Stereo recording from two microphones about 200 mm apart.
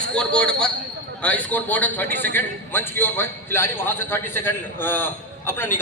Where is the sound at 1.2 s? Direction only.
5° left (ahead or behind).